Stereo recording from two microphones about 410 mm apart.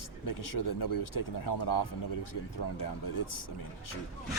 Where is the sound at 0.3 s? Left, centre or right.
Left.